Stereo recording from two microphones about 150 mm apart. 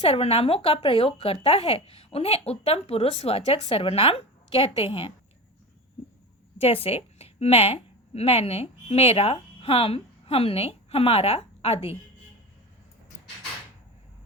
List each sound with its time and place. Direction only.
0.0 s speech: 40° left (ahead or behind)
6.6 s a woman's voice: 40° left (ahead or behind)